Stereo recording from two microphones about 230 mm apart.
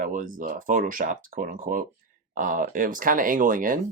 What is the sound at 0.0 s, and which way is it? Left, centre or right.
Speech, right.